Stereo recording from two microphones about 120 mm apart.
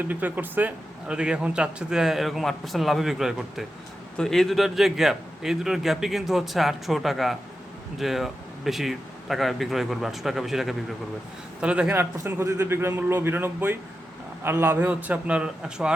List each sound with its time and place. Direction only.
0.0 s a man's voice: 15° right (ahead or behind)